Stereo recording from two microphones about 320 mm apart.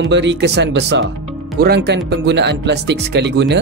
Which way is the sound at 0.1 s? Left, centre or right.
Right.